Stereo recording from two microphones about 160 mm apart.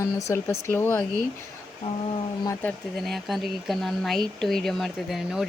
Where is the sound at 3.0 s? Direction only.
Centre (ahead or behind).